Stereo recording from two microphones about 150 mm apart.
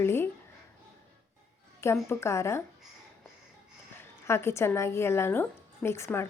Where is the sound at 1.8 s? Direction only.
15° left (ahead or behind).